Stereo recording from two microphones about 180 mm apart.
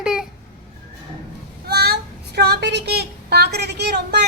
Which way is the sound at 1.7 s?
65° right (ahead or behind).